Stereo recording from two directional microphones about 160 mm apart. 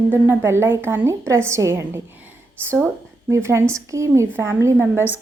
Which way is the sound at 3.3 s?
15° right (ahead or behind).